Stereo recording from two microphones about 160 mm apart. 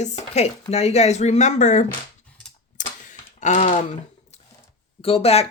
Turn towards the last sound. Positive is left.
turn(degrees=40)  # may be behind; listen again after turning